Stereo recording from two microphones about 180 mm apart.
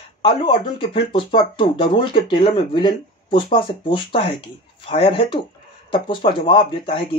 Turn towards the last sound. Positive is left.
turn(degrees=30)  # may be behind; listen again after turning